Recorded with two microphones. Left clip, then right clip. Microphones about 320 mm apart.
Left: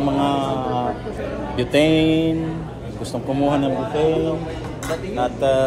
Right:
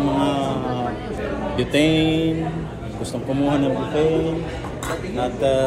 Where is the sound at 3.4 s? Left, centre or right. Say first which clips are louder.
Left 1 dB; centre.